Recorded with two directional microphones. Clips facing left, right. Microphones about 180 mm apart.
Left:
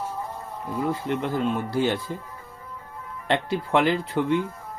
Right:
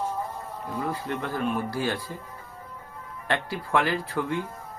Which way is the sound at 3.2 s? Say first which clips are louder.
Left 4 dB; 20° left (ahead or behind).